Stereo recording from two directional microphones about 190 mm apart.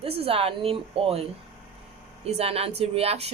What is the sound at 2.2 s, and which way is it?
Speech, 35° right (ahead or behind).